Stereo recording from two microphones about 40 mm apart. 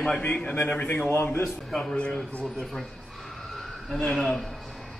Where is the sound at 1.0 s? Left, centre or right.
Left.